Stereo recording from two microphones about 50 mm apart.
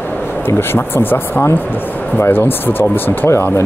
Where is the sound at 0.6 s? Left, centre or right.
Left.